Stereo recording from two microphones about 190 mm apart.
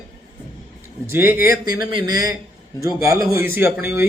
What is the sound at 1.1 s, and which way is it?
Speech, 10° right (ahead or behind).